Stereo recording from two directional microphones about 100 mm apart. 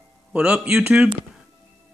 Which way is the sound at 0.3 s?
10° right (ahead or behind).